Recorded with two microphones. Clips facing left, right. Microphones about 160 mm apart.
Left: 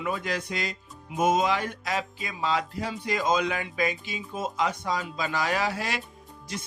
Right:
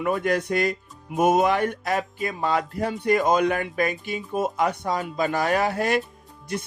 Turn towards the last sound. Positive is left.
turn(degrees=-60)  # may be behind; listen again after turning